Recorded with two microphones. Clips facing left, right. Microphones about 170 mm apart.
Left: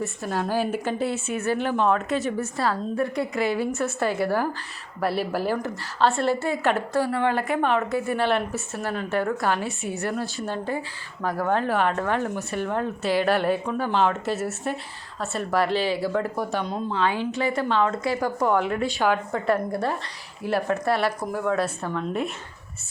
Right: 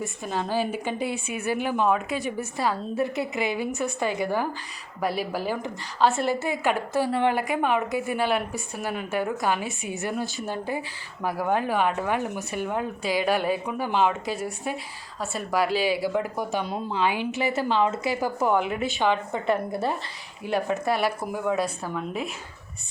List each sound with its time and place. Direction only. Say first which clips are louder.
0.0 s a woman's voice: left 2 dB; 5° left (ahead or behind)
0.6 s speech: left 2 dB; 10° right (ahead or behind)
2.9 s a woman's voice: left 1 dB; centre (ahead or behind)
5.5 s a woman's voice: left 3 dB; 5° right (ahead or behind)
6.1 s a woman's voice: left 2 dB; 20° right (ahead or behind)
16.3 s speech: left 1 dB; centre (ahead or behind)
17.3 s speech: left 1 dB; 25° right (ahead or behind)
17.8 s a woman's voice: left 1 dB; 5° right (ahead or behind)